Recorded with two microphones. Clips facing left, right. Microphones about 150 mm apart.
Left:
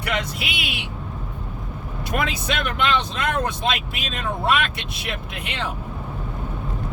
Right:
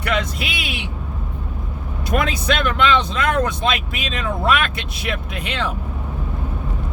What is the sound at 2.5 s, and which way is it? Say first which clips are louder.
Speech: right 6 dB; 90° right.